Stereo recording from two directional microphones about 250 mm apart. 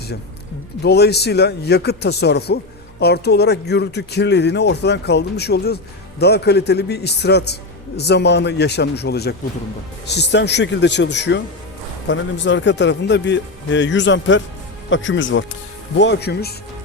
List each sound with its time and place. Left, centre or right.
0.8 s a man's voice: left